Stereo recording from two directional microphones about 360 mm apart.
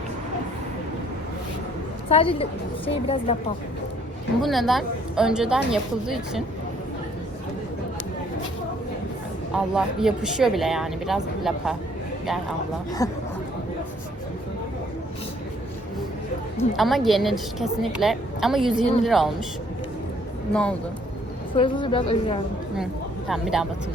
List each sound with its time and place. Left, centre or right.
2.0 s a woman's voice: centre
4.4 s speech: centre
9.7 s speech: centre
13.0 s a woman's voice: centre
16.7 s speech: centre
20.5 s speech: centre
21.5 s a woman's voice: centre
23.3 s speech: centre